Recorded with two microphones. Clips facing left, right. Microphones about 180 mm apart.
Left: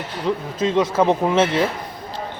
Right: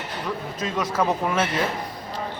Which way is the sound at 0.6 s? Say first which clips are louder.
Left 7 dB; 25° left (ahead or behind).